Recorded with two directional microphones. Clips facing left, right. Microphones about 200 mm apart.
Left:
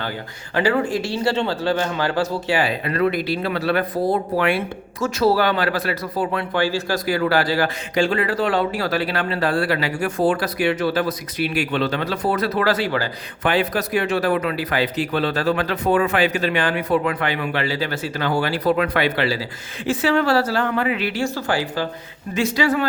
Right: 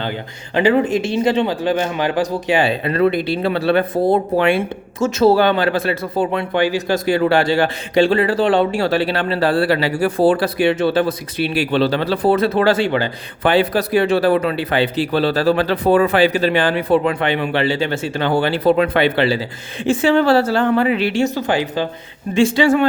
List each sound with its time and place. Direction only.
0.0 s speech: 20° right (ahead or behind)